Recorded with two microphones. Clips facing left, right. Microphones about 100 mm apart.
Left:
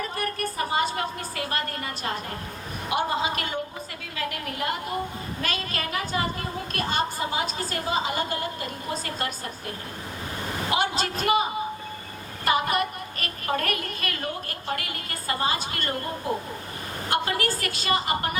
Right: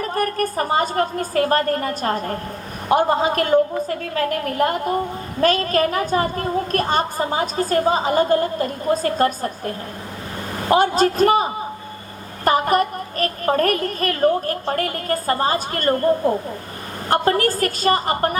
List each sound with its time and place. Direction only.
0.0 s a woman's voice: 45° right (ahead or behind)
12.5 s a woman's voice: 40° right (ahead or behind)